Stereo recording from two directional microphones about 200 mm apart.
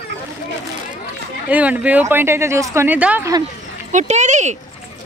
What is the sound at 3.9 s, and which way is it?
Speech, 35° right (ahead or behind).